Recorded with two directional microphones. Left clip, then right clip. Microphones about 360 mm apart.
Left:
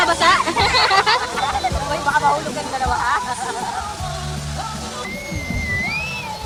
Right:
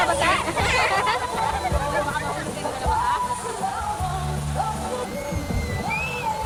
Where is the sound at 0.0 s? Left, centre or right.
Left.